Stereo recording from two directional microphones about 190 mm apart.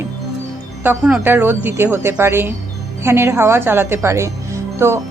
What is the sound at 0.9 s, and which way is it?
Speech, 5° right (ahead or behind).